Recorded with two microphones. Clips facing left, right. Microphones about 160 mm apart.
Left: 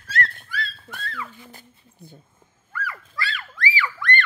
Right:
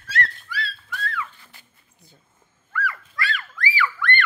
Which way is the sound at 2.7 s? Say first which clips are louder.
Right 3 dB; 30° left (ahead or behind).